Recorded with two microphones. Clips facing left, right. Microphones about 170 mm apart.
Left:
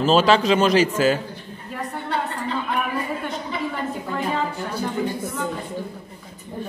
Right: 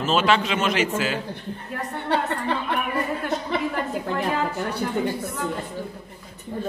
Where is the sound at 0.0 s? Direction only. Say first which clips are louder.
Left 4 dB; 35° left (ahead or behind).